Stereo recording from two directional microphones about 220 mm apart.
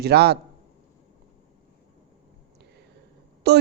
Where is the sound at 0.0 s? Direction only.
45° right (ahead or behind).